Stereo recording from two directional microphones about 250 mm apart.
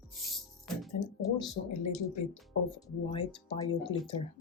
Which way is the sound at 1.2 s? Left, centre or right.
Centre.